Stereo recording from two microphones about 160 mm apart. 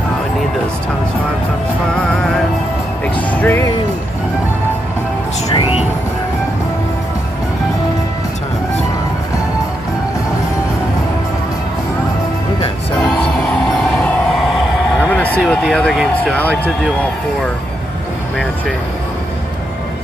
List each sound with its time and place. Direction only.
3.3 s speech: 10° left (ahead or behind)
5.5 s vehicle: 35° left (ahead or behind)
13.2 s music: 10° left (ahead or behind)
14.0 s a sound: 10° left (ahead or behind)
15.1 s speech: 10° left (ahead or behind)